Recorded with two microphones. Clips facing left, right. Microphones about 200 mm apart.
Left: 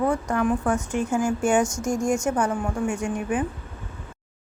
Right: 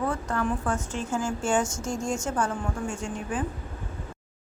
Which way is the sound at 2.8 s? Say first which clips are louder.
Left 6 dB; 70° left (ahead or behind).